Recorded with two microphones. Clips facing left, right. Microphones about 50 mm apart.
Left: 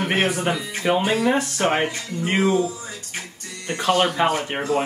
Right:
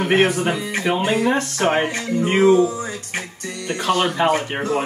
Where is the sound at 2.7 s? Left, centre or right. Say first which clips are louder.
Right 7 dB; right.